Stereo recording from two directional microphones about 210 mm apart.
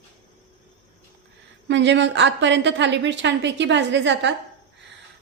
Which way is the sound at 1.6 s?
55° right (ahead or behind).